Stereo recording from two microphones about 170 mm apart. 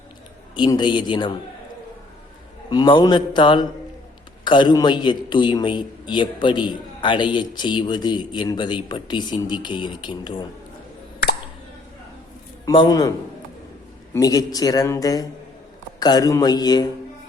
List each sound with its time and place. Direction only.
0.5 s a man's voice: 25° left (ahead or behind)
2.6 s a man's voice: 25° left (ahead or behind)
12.7 s a man's voice: 25° left (ahead or behind)